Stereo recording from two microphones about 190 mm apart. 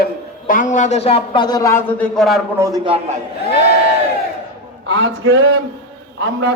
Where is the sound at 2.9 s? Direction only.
35° right (ahead or behind).